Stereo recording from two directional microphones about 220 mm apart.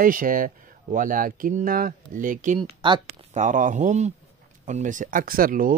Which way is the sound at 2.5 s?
20° right (ahead or behind).